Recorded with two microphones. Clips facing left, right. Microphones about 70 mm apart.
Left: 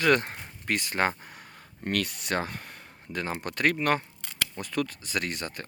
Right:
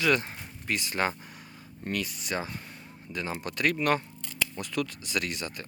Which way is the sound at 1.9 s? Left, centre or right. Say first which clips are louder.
Left 3 dB; left.